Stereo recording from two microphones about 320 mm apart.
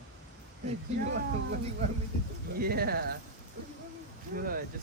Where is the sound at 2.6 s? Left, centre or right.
Right.